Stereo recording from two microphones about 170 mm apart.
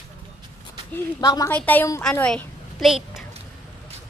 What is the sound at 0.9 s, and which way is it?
Speech, 20° left (ahead or behind).